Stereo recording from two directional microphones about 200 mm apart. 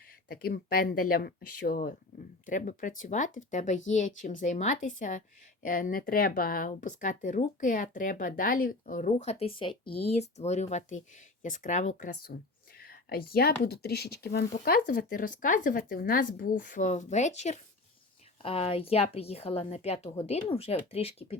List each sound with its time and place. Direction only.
0.3 s a woman's voice: 50° left (ahead or behind); by 21.3 s 30° left (ahead or behind)